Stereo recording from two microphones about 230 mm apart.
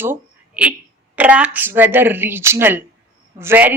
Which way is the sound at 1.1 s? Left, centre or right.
Centre.